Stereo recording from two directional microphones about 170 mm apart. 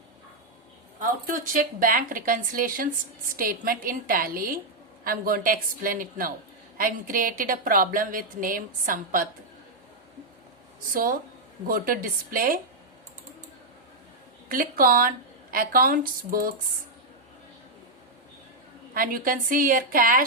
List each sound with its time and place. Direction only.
0.9 s a woman's voice: 50° right (ahead or behind)
10.9 s a woman's voice: 55° right (ahead or behind)
14.5 s a woman's voice: 55° right (ahead or behind)
18.9 s a woman's voice: 55° right (ahead or behind)